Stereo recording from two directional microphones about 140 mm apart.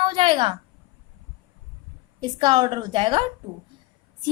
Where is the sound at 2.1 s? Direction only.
30° right (ahead or behind).